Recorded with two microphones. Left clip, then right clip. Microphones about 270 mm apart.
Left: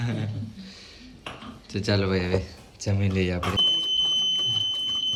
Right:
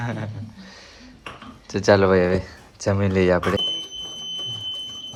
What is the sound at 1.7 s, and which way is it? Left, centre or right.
Speech, centre.